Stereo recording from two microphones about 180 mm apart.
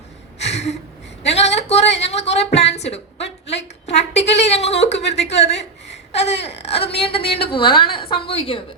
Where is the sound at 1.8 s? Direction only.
75° left (ahead or behind).